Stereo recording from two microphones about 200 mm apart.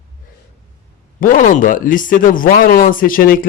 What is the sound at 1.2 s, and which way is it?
Speech, 40° left (ahead or behind).